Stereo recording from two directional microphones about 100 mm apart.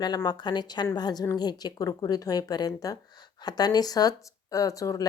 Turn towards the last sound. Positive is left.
turn(degrees=35)  # may be behind; listen again after turning